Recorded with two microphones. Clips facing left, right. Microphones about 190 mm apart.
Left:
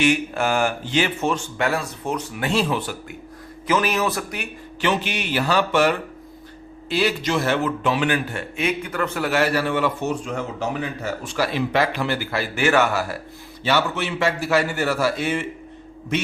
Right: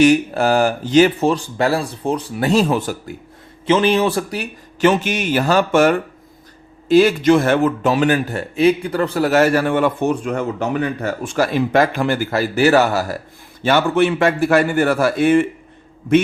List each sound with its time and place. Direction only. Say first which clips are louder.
0.0 s speech: right 7 dB; 35° right (ahead or behind)
3.7 s speech: right 6 dB; 30° right (ahead or behind)
13.6 s speech: right 7 dB; 50° right (ahead or behind)